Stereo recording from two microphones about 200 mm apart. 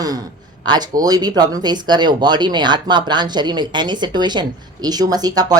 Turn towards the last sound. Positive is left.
turn(degrees=-20)  # may be behind; listen again after turning